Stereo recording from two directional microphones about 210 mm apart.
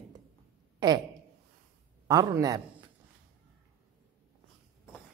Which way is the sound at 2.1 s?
15° right (ahead or behind).